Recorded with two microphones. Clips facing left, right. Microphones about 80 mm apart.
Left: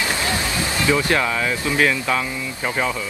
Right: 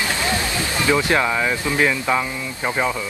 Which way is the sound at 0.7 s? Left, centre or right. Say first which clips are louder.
Right 1 dB; right.